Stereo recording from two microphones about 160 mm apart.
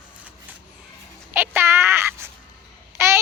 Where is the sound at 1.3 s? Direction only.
15° right (ahead or behind).